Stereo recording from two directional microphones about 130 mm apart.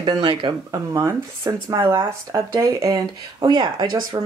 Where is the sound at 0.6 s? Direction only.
25° right (ahead or behind).